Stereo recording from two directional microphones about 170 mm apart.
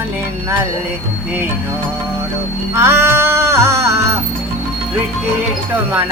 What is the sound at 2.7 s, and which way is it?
Music, 15° right (ahead or behind).